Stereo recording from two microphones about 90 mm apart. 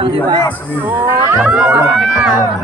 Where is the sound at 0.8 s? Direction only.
15° right (ahead or behind).